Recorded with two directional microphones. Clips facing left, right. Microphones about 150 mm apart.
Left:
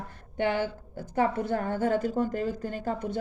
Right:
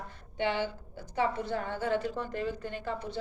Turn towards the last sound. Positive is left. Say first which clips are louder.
# left 5 dB
turn(degrees=50)  # may be behind; listen again after turning